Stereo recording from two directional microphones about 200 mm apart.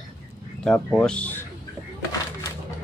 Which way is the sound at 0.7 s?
5° left (ahead or behind).